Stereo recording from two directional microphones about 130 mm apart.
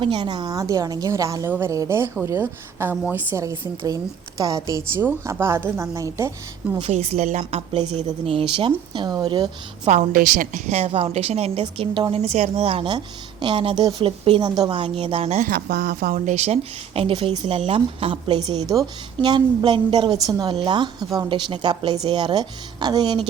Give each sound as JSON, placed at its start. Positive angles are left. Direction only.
{"t": 0.0, "sound": "a woman's voice", "side_deg": -40}
{"t": 3.8, "sound": "a woman's voice", "side_deg": -25}
{"t": 6.8, "sound": "speech", "side_deg": -55}
{"t": 9.8, "sound": "speech", "side_deg": -65}
{"t": 11.6, "sound": "a woman's voice", "side_deg": -40}
{"t": 12.1, "sound": "a woman's voice", "side_deg": -55}
{"t": 16.0, "sound": "a woman's voice", "side_deg": -75}